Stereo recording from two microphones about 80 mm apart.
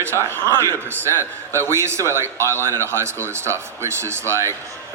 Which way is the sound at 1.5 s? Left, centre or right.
Right.